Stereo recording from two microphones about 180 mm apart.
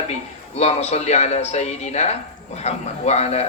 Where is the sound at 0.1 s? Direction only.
35° left (ahead or behind).